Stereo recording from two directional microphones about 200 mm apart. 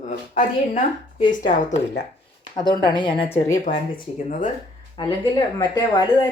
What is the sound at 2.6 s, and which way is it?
Speech, 20° left (ahead or behind).